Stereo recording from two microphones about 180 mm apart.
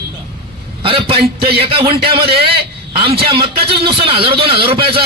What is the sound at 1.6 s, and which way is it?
A man's voice, 30° right (ahead or behind).